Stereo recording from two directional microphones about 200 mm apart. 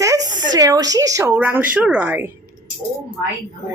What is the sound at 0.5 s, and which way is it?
A woman's voice, 20° right (ahead or behind).